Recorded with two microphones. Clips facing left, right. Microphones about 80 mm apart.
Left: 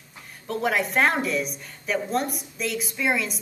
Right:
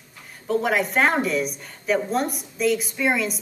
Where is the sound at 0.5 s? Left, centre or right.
Centre.